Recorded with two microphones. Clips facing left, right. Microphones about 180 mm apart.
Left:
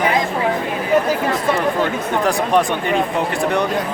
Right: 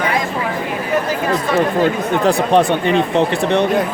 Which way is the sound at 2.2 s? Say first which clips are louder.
Right 4 dB; 25° right (ahead or behind).